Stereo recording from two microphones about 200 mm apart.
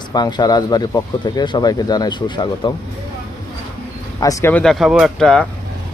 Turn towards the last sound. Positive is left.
turn(degrees=5)  # may be behind; listen again after turning